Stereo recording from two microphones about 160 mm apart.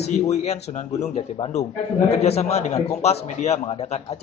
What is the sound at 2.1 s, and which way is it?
A man's voice, 40° left (ahead or behind).